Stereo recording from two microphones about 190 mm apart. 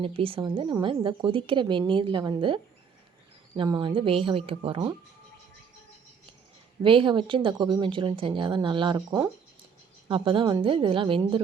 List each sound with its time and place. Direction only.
0.0 s speech: 30° right (ahead or behind)
6.8 s speech: 25° right (ahead or behind)
9.0 s speech: 15° right (ahead or behind)
10.1 s speech: 25° right (ahead or behind)